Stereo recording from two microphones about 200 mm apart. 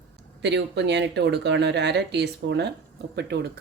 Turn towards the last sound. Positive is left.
turn(degrees=-55)  # may be behind; listen again after turning